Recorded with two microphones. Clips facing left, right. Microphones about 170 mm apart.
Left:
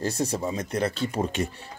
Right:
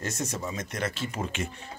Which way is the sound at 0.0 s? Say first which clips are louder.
Left 6 dB; 35° left (ahead or behind).